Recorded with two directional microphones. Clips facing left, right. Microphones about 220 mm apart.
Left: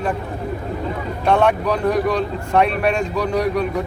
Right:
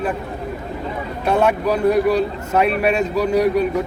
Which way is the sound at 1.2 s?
5° right (ahead or behind).